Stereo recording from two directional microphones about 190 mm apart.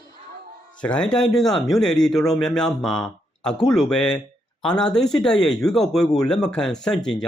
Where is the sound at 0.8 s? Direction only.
5° left (ahead or behind).